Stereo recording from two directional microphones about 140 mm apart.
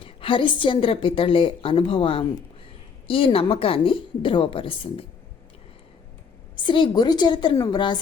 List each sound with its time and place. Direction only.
0.0 s a woman's voice: 40° left (ahead or behind)
6.6 s a woman's voice: 35° left (ahead or behind)